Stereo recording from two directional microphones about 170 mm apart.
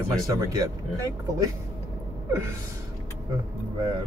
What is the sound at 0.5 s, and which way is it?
Speech, 20° right (ahead or behind).